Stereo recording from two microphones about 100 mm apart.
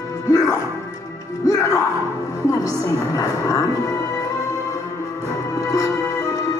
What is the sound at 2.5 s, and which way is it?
A woman's voice, 35° left (ahead or behind).